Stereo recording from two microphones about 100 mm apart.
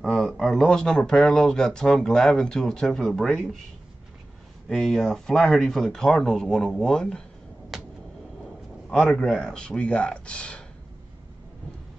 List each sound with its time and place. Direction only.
0.0 s speech: centre (ahead or behind)
4.6 s speech: 5° left (ahead or behind)
7.7 s a sound: centre (ahead or behind)
8.9 s speech: 5° left (ahead or behind)